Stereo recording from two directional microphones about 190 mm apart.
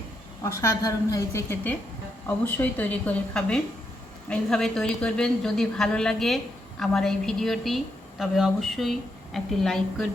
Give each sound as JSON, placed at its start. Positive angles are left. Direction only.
{"t": 0.4, "sound": "a woman's voice", "side_deg": 15}